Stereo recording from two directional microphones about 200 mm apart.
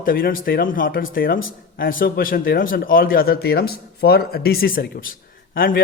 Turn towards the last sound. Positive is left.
turn(degrees=45)  # may be behind; listen again after turning